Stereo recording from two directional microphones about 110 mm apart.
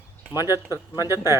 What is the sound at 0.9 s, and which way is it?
Speech, 25° right (ahead or behind).